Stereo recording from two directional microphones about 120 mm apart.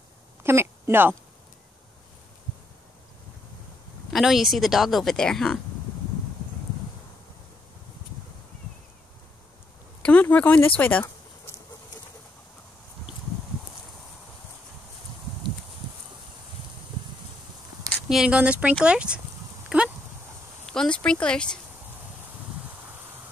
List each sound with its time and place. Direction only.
0.4 s a sound: 20° right (ahead or behind)
4.1 s speech: centre (ahead or behind)
10.0 s a sound: 10° left (ahead or behind)
18.0 s speech: 5° right (ahead or behind)
19.7 s dog: 5° right (ahead or behind)
20.6 s speech: 5° left (ahead or behind)